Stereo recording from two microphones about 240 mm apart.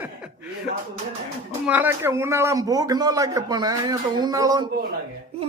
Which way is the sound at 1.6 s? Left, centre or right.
Centre.